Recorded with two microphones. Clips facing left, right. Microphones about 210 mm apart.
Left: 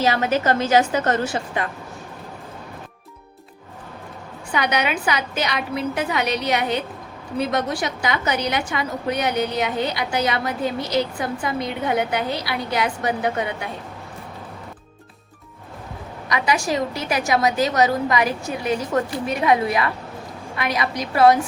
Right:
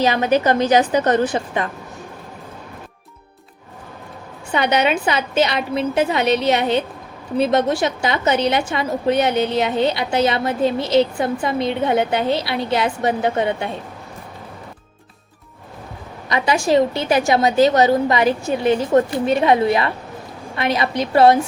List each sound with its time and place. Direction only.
0.0 s a woman's voice: 20° right (ahead or behind)
4.5 s a woman's voice: 25° right (ahead or behind)
16.3 s a woman's voice: 25° right (ahead or behind)